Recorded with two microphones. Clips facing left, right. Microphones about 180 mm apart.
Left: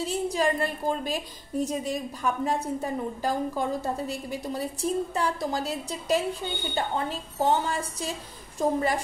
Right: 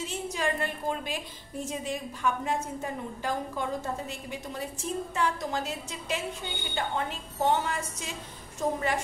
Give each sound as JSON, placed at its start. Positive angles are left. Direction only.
{"t": 0.0, "sound": "a woman's voice", "side_deg": 35}